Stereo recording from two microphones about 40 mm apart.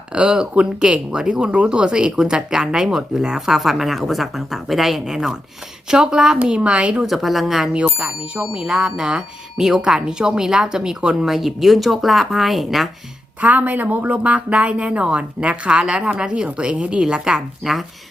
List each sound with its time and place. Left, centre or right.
0.1 s speech: right
6.5 s speech: right
7.0 s speech: centre
7.7 s speech: right
11.3 s speech: centre
13.4 s speech: right
17.0 s speech: centre
17.6 s speech: centre